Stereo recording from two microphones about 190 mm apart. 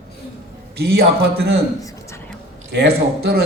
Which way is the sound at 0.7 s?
55° right (ahead or behind).